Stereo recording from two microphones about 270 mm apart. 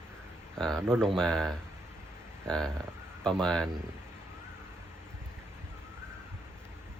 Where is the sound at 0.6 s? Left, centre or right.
Centre.